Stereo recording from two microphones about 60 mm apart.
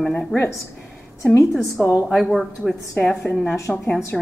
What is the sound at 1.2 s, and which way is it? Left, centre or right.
Speech, left.